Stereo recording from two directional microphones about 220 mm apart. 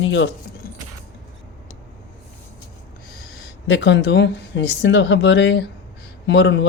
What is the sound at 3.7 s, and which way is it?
A man's voice, 55° left (ahead or behind).